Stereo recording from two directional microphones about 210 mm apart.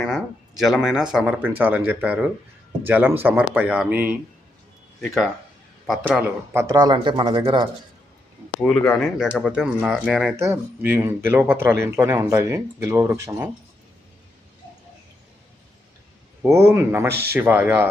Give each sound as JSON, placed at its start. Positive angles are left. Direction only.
{"t": 0.6, "sound": "speech", "side_deg": 0}
{"t": 8.8, "sound": "speech", "side_deg": 5}
{"t": 10.3, "sound": "speech", "side_deg": -10}
{"t": 16.4, "sound": "speech", "side_deg": -10}